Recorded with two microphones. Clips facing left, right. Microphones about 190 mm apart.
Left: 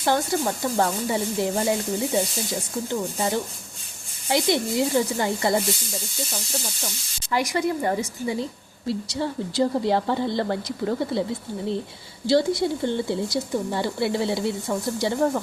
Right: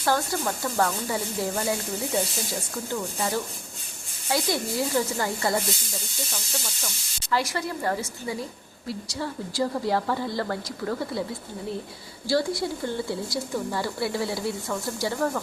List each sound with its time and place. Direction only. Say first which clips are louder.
0.0 s speech: left 3 dB; 20° left (ahead or behind)
2.9 s speech: left 3 dB; 20° left (ahead or behind)
7.3 s a woman's voice: left 4 dB; 15° left (ahead or behind)
12.2 s speech: left 5 dB; 20° left (ahead or behind)